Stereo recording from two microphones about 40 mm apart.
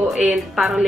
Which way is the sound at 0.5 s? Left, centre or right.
Centre.